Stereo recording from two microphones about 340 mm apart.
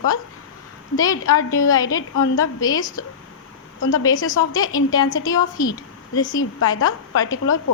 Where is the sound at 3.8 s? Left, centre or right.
Left.